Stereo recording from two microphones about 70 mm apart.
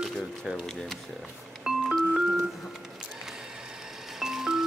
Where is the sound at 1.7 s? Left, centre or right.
Centre.